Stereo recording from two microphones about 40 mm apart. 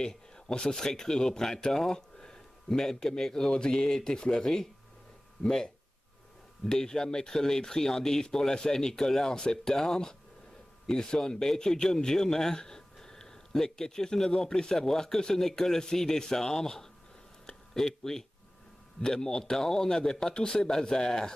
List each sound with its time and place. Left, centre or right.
0.0 s speech: centre
5.4 s speech: left
6.6 s speech: centre